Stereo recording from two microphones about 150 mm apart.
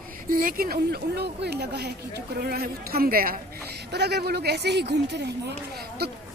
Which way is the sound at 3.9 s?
90° right.